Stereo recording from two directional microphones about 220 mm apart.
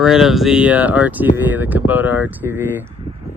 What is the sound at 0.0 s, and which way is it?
Speech, centre (ahead or behind).